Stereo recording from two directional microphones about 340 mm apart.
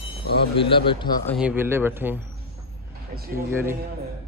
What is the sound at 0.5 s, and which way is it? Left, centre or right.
Speech, centre.